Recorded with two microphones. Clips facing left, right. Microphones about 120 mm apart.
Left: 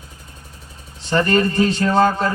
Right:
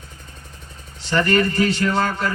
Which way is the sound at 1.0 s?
30° left (ahead or behind).